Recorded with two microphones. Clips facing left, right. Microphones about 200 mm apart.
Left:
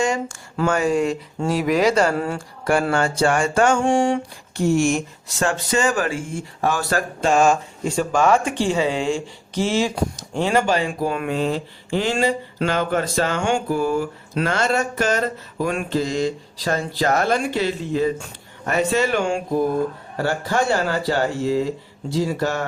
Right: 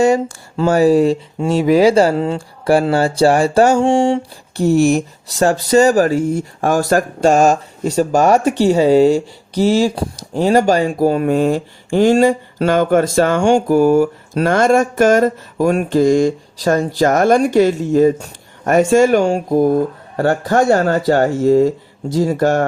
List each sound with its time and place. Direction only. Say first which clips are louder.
0.0 s speech: right 9 dB; 35° right (ahead or behind)